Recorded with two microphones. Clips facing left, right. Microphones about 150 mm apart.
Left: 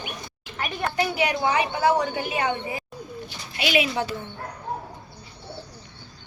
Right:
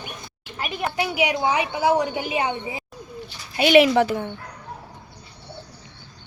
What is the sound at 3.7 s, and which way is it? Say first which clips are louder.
Speech: right 10 dB; 80° right.